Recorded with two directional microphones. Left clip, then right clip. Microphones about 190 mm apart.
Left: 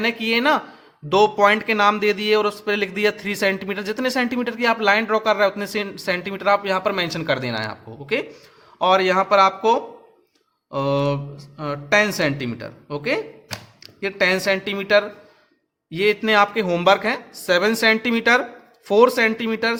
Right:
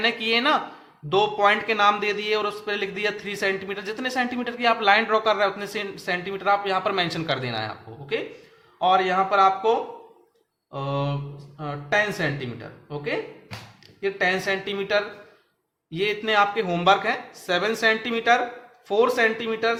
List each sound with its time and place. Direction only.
0.0 s a man's voice: 40° left (ahead or behind)